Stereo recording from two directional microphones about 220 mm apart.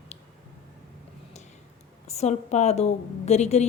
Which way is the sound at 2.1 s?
30° left (ahead or behind).